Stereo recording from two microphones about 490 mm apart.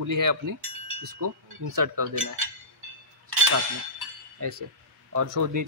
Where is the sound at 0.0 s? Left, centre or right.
Right.